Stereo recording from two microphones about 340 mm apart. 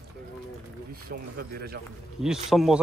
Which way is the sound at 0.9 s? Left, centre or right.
Right.